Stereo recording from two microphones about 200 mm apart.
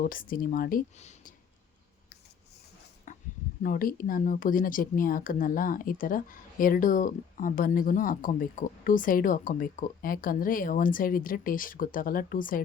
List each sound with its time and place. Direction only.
0.0 s speech: 45° left (ahead or behind)
3.1 s a sound: 40° left (ahead or behind)
3.6 s speech: 45° left (ahead or behind)